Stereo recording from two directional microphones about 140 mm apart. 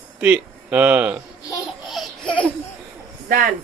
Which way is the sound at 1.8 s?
Centre (ahead or behind).